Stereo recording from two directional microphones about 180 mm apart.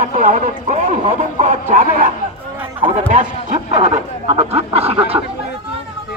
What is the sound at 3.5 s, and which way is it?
Speech, 40° right (ahead or behind).